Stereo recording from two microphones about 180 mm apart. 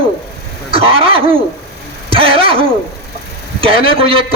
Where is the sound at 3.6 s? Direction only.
30° right (ahead or behind).